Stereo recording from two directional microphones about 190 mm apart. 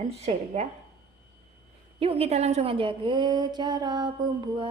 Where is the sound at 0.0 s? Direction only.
35° right (ahead or behind).